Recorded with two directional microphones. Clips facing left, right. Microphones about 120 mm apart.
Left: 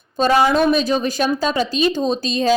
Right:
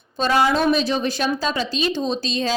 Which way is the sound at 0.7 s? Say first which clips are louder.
Left 2 dB; 45° left (ahead or behind).